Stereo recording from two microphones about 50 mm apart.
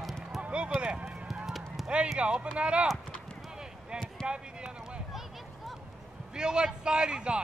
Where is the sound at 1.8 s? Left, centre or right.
Right.